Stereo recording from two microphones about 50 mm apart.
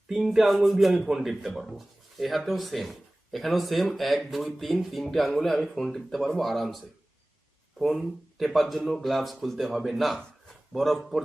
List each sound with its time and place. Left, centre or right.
0.1 s speech: centre
8.0 s speech: centre